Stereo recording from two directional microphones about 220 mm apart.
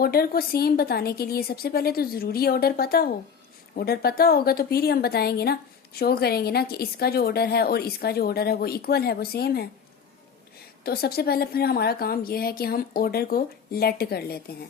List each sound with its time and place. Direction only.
0.0 s speech: 45° left (ahead or behind)
10.8 s speech: 45° left (ahead or behind)